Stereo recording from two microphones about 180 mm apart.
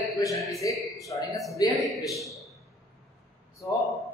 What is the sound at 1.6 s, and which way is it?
Speech, 20° left (ahead or behind).